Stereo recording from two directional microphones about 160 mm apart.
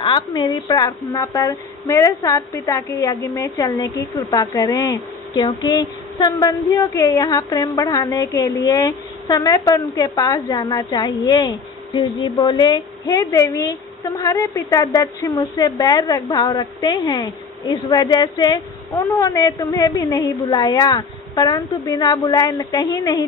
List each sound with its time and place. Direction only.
0.0 s a woman's voice: 30° left (ahead or behind)